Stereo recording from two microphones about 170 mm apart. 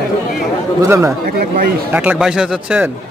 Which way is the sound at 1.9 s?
5° right (ahead or behind).